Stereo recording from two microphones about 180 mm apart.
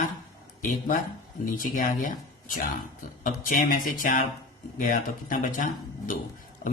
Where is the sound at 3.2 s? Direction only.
50° left (ahead or behind).